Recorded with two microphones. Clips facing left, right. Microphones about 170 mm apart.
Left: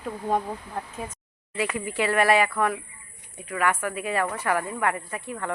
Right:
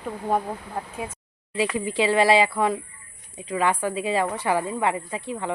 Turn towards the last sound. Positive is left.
turn(degrees=-20)  # may be behind; listen again after turning